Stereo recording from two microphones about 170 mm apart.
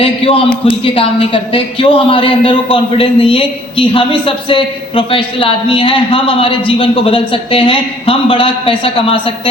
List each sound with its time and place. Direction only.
0.0 s a man's voice: 30° left (ahead or behind)